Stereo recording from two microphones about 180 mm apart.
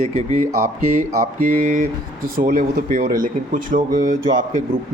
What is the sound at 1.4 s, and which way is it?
Speech, 50° right (ahead or behind).